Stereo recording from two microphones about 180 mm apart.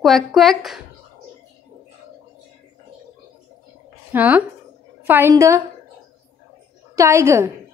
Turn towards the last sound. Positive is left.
turn(degrees=-15)  # may be behind; listen again after turning